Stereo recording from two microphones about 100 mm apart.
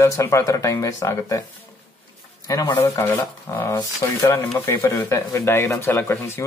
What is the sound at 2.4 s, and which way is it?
Speech, 35° left (ahead or behind).